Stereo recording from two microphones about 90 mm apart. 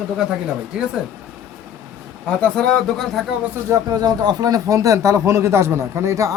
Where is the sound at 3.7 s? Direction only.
45° right (ahead or behind).